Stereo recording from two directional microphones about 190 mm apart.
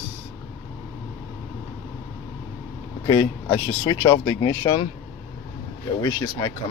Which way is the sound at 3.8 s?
15° left (ahead or behind).